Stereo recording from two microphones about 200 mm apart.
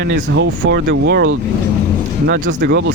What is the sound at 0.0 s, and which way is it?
Speech, 60° right (ahead or behind).